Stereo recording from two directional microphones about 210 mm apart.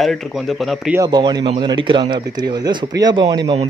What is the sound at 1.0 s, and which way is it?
Speech, 20° right (ahead or behind).